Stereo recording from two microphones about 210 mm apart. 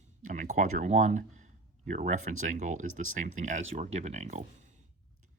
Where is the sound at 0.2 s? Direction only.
40° right (ahead or behind).